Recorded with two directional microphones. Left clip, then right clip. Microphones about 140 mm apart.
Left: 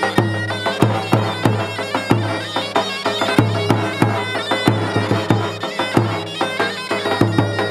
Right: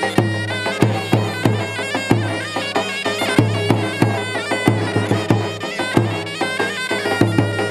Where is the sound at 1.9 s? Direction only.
Centre (ahead or behind).